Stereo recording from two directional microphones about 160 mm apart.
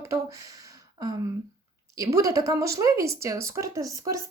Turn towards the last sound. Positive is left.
turn(degrees=-20)  # may be behind; listen again after turning